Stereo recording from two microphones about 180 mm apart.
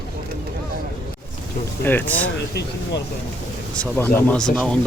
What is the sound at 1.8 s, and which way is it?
Speech, 10° left (ahead or behind).